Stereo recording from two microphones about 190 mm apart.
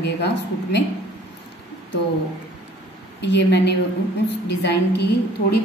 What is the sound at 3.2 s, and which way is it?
A woman's voice, 65° left (ahead or behind).